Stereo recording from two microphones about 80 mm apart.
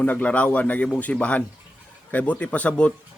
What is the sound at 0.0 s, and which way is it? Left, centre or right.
Speech, centre.